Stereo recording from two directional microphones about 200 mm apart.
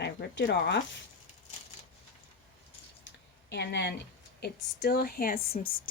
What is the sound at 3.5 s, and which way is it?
Speech, 60° left (ahead or behind).